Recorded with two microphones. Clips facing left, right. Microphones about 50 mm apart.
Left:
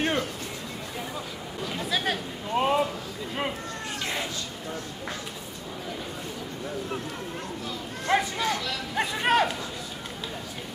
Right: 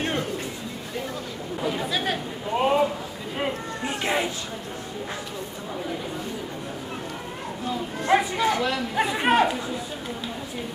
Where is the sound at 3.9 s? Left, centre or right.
Right.